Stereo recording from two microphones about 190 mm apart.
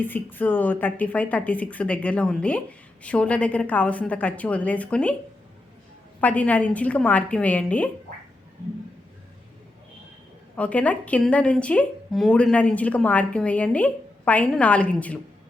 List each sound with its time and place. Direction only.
0.0 s a woman's voice: 10° left (ahead or behind)
6.1 s a woman's voice: 10° left (ahead or behind)
10.5 s a woman's voice: 5° left (ahead or behind)